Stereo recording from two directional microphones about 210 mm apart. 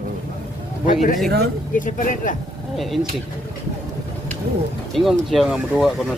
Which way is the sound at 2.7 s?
Centre (ahead or behind).